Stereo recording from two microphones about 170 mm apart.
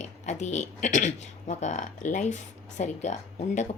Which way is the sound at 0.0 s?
45° left (ahead or behind).